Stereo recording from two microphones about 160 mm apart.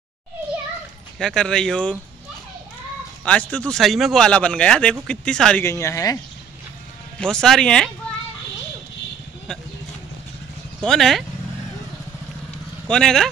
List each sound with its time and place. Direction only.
1.2 s speech: 5° left (ahead or behind)
3.3 s speech: 5° left (ahead or behind)
5.7 s speech: 20° left (ahead or behind)
7.2 s speech: 5° left (ahead or behind)
10.9 s speech: centre (ahead or behind)
12.8 s speech: 5° left (ahead or behind)